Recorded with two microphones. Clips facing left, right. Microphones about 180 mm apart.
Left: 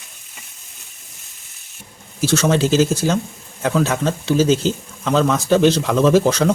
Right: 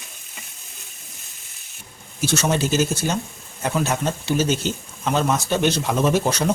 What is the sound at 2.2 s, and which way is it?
Speech, 90° left.